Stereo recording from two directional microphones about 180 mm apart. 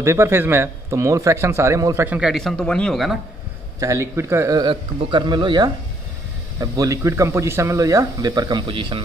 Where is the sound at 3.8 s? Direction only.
15° right (ahead or behind).